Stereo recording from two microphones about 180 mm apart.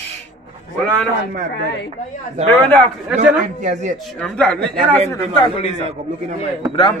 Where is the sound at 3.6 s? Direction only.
40° right (ahead or behind).